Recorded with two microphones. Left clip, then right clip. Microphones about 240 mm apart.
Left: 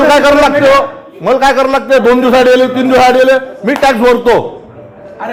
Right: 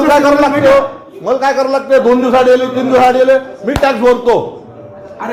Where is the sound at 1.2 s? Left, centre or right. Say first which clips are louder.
Left 4 dB; left.